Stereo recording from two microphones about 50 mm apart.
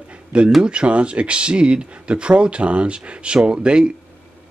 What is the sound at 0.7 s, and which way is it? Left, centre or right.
A man's voice, right.